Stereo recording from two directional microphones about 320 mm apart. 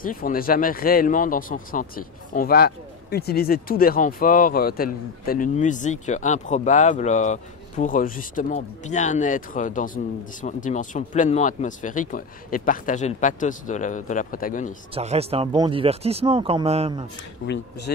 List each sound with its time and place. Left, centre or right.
0.0 s speech: left
15.0 s speech: centre
17.5 s speech: left